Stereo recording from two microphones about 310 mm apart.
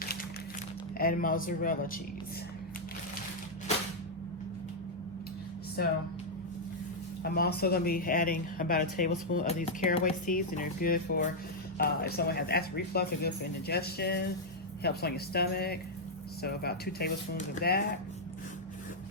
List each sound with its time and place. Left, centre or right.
0.9 s speech: left
5.8 s speech: left
7.2 s speech: left